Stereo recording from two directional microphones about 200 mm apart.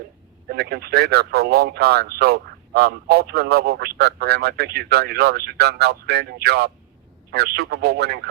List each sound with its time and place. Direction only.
0.4 s speech: 55° right (ahead or behind)